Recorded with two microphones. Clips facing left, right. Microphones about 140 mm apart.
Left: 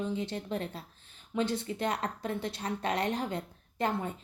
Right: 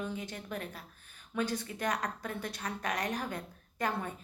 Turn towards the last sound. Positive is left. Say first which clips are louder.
# left 3 dB
turn(degrees=25)  # may be behind; listen again after turning